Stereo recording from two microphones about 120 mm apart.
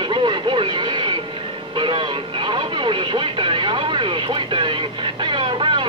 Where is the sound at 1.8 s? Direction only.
40° right (ahead or behind).